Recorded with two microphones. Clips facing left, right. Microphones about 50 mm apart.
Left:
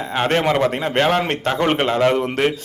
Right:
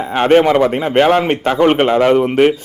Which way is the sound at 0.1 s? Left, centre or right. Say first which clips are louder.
Right 8 dB; centre.